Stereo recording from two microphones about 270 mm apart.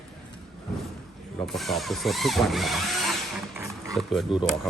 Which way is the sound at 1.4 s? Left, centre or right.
Centre.